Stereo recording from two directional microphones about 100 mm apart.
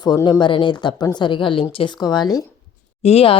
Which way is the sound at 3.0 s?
90° left.